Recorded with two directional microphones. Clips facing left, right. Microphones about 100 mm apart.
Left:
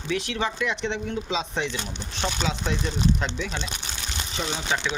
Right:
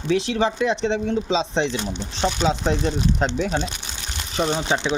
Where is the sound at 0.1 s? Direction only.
30° right (ahead or behind).